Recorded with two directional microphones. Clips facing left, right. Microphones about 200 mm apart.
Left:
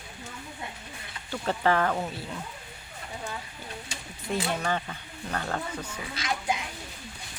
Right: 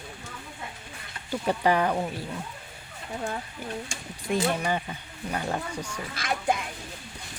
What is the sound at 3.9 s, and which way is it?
Speech, 50° right (ahead or behind).